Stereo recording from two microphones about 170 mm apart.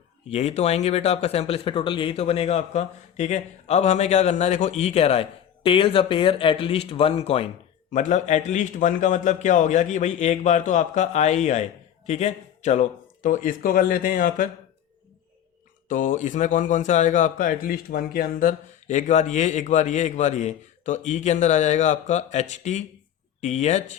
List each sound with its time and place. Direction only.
0.3 s speech: 40° left (ahead or behind)
15.9 s speech: 50° left (ahead or behind)